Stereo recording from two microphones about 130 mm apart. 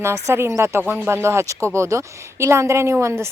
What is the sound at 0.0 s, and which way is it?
A woman's voice, 20° right (ahead or behind).